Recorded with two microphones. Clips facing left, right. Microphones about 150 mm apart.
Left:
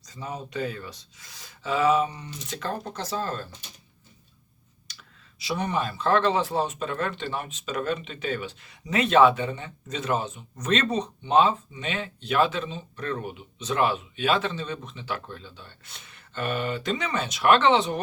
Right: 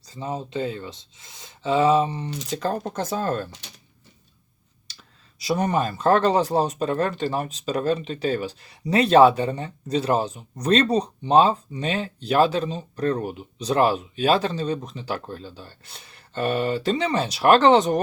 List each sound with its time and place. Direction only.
0.0 s speech: 25° right (ahead or behind); by 3.4 s 50° right (ahead or behind)
5.4 s speech: 40° right (ahead or behind)